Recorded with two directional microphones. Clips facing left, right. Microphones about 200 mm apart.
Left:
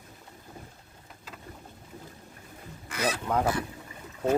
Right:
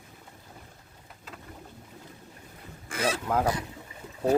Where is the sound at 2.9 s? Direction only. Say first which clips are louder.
Right 1 dB; 25° right (ahead or behind).